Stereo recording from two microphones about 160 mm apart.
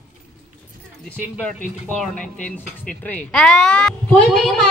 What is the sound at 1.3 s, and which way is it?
Speech, 5° left (ahead or behind).